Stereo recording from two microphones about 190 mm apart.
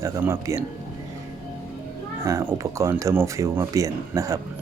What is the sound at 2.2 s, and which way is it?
Speech, 15° right (ahead or behind).